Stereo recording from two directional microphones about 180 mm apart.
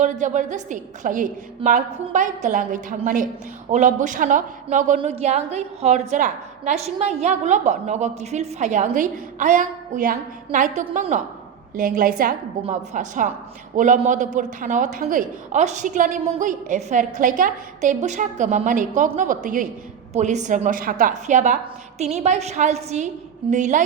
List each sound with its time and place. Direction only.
0.0 s a woman's voice: 45° right (ahead or behind)
12.6 s a woman's voice: 40° right (ahead or behind)